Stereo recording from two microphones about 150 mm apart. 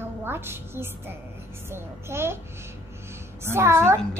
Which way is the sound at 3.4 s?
15° right (ahead or behind).